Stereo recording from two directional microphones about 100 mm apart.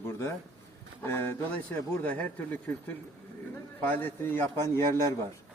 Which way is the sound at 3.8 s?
20° left (ahead or behind).